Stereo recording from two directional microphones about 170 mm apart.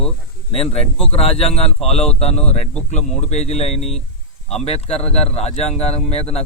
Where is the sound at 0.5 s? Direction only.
35° left (ahead or behind).